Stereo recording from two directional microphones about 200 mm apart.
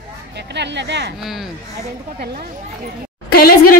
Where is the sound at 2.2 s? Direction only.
50° right (ahead or behind).